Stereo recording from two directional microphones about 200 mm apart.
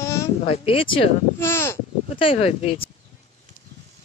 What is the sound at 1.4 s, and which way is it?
Speech, 10° left (ahead or behind).